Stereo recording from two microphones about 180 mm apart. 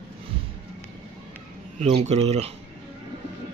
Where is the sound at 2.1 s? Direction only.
35° right (ahead or behind).